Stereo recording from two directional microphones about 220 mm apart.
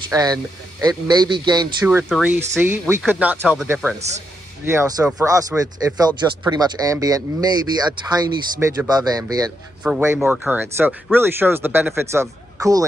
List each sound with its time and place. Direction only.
0.1 s speech: 15° right (ahead or behind)
1.9 s speech: 5° right (ahead or behind)
9.8 s speech: 5° right (ahead or behind)